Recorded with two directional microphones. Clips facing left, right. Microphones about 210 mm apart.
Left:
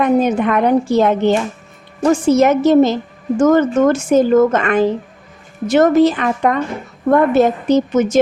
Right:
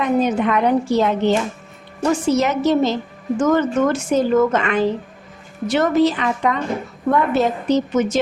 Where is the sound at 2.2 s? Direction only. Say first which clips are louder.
Left 6 dB; 50° left (ahead or behind).